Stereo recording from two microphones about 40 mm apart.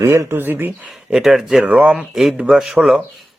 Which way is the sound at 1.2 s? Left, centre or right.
Centre.